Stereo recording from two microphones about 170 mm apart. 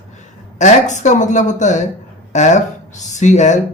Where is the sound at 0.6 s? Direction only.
45° left (ahead or behind).